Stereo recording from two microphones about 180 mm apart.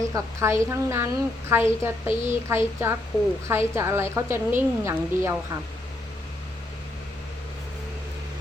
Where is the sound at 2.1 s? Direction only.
40° right (ahead or behind).